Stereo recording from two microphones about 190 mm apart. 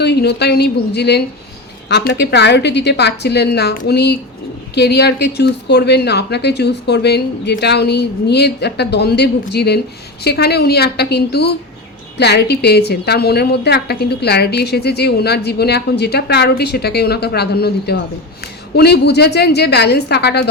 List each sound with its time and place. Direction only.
0.0 s a woman's voice: 60° left (ahead or behind)